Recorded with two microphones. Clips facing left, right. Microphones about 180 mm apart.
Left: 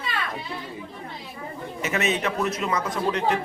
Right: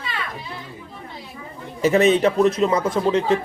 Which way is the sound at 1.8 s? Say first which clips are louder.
Right 10 dB; 35° right (ahead or behind).